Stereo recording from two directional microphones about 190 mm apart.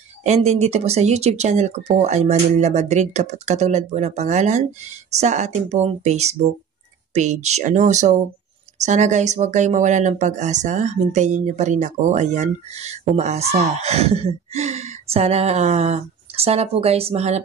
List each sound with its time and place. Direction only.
0.2 s speech: 35° right (ahead or behind)